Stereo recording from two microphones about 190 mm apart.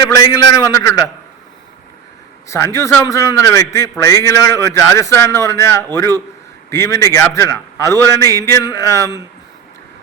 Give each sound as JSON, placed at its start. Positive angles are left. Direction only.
{"t": 0.2, "sound": "a man's voice", "side_deg": 15}
{"t": 2.5, "sound": "a man's voice", "side_deg": 15}